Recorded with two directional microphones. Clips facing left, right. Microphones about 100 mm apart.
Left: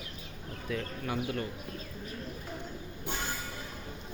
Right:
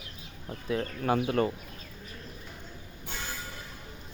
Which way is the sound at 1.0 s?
35° right (ahead or behind).